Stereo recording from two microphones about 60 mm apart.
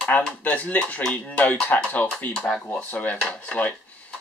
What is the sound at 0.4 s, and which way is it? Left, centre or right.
Speech, left.